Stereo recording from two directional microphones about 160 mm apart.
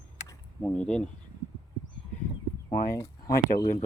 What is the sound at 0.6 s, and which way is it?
Speech, 5° left (ahead or behind).